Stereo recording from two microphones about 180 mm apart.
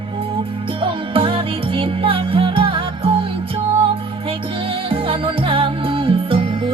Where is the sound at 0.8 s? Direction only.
30° right (ahead or behind).